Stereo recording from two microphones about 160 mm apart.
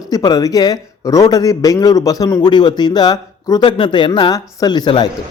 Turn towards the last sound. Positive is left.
turn(degrees=25)  # may be behind; listen again after turning